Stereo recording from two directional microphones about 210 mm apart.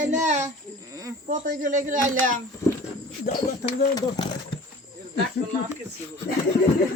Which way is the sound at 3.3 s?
45° left (ahead or behind).